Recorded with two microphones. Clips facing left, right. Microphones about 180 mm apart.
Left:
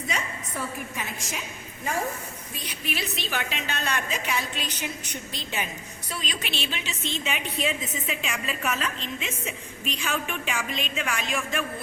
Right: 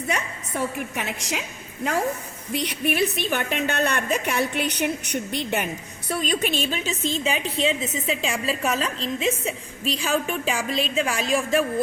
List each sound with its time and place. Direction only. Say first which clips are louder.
0.1 s a woman's voice: right 5 dB; 70° right (ahead or behind)
6.1 s a woman's voice: right 10 dB; 50° right (ahead or behind); by 11.6 s 35° right (ahead or behind)